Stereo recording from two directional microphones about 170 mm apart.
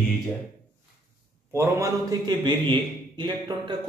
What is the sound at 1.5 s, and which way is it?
A man's voice, 15° right (ahead or behind).